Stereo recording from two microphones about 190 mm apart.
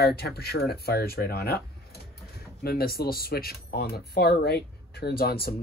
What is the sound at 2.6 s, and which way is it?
Speech, 50° left (ahead or behind).